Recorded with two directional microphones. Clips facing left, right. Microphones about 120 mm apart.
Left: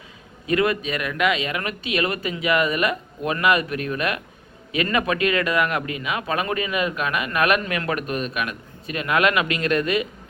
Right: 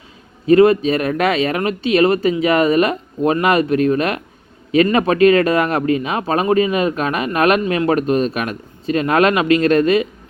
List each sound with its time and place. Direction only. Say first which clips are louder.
0.4 s speech: right 11 dB; 30° right (ahead or behind)